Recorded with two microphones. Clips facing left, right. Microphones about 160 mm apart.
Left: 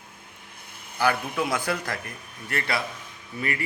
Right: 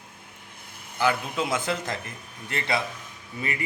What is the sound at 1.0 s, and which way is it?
A man's voice, 20° right (ahead or behind).